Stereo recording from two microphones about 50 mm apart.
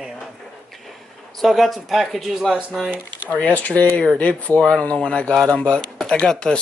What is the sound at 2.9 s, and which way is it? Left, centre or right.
Speech, right.